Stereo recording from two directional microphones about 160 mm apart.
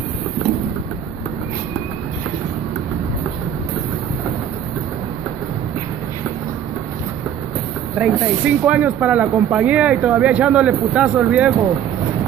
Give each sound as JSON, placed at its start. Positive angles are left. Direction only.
{"t": 8.0, "sound": "speech", "side_deg": -10}